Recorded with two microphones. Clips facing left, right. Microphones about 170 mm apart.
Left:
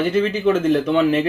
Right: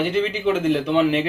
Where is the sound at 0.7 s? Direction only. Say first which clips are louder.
Left 2 dB; 45° left (ahead or behind).